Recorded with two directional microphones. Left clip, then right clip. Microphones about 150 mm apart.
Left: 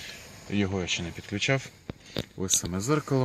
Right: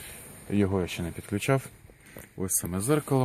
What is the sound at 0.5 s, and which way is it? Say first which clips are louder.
Speech: right 1 dB; 25° right (ahead or behind).